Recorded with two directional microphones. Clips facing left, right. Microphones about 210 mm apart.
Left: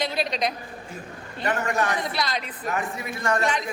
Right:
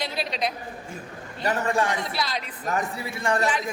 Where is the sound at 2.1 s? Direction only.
5° right (ahead or behind).